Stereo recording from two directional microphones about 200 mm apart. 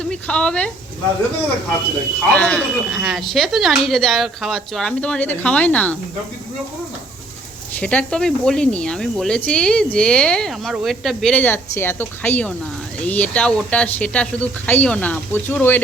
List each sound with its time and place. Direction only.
0.0 s speech: 5° left (ahead or behind)
2.3 s speech: 5° left (ahead or behind)
7.8 s speech: 5° left (ahead or behind)